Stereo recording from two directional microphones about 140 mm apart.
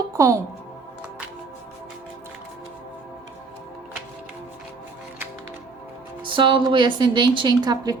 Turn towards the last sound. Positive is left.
turn(degrees=-25)  # may be behind; listen again after turning